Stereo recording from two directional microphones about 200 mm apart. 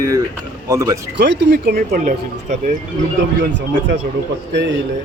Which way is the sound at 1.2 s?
55° right (ahead or behind).